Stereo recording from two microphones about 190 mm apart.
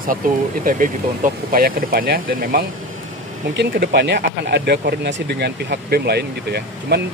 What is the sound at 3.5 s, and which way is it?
Speech, 60° right (ahead or behind).